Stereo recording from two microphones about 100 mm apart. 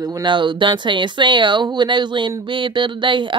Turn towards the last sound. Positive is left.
turn(degrees=-55)  # may be behind; listen again after turning